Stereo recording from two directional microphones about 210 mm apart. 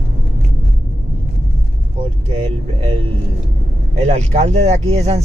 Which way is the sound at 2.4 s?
25° right (ahead or behind).